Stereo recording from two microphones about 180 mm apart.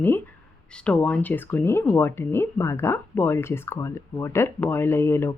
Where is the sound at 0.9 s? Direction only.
5° left (ahead or behind).